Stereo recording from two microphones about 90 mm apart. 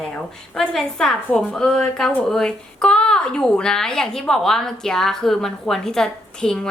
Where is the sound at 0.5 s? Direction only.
5° left (ahead or behind).